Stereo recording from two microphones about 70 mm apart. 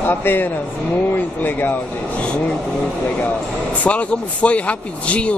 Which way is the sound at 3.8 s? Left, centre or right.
Centre.